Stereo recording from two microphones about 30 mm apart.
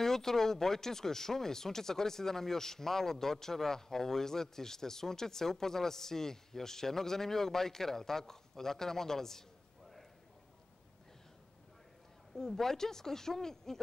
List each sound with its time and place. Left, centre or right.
0.0 s speech: centre
12.4 s speech: centre